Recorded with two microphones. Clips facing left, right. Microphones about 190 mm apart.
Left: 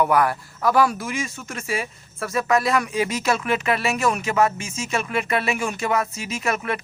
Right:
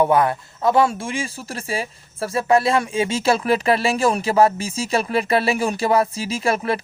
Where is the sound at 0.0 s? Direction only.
25° right (ahead or behind).